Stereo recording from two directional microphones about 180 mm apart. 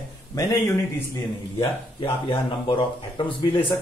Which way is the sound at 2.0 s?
30° left (ahead or behind).